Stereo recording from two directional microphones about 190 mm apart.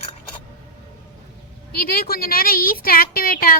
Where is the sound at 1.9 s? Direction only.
50° left (ahead or behind).